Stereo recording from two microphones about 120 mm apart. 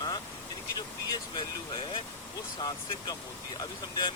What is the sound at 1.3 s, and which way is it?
Speech, 40° left (ahead or behind).